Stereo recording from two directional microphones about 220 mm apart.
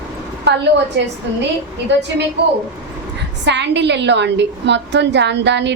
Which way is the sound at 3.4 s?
55° right (ahead or behind).